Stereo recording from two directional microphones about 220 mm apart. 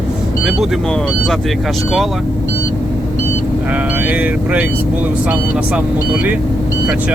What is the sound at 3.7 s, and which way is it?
Speech, 5° right (ahead or behind).